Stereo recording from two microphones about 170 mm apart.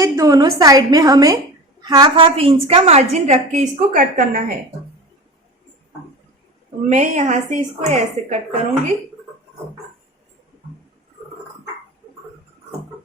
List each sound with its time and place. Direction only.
0.0 s a woman's voice: 20° right (ahead or behind); by 4.5 s 55° right (ahead or behind)
6.8 s speech: 45° right (ahead or behind)